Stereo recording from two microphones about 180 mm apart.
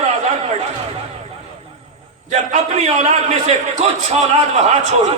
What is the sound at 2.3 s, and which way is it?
A man's voice, 40° right (ahead or behind).